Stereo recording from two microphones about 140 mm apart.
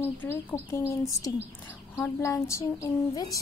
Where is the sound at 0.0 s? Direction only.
15° left (ahead or behind).